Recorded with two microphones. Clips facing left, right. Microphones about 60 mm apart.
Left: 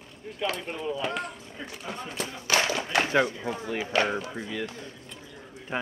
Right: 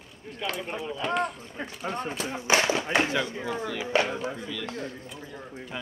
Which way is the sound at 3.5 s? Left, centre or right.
Left.